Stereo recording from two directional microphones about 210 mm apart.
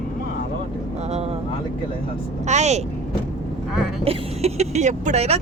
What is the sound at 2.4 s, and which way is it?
Speech, 35° right (ahead or behind).